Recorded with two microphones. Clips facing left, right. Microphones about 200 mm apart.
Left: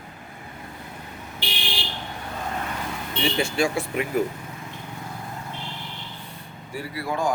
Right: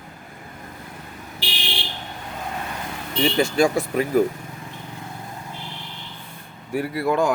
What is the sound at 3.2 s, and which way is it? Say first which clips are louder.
Speech: right 5 dB; 40° right (ahead or behind).